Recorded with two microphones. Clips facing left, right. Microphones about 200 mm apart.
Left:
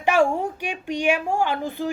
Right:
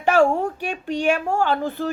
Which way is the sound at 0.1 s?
40° right (ahead or behind).